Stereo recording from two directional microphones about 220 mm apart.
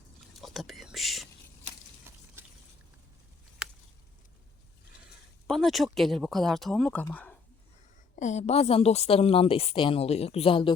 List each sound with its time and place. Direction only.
0.4 s whispering: centre (ahead or behind)
5.5 s speech: centre (ahead or behind)
8.1 s a woman's voice: 35° left (ahead or behind)